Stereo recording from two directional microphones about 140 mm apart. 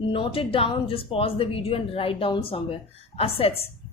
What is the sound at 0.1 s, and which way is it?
A woman's voice, 40° left (ahead or behind).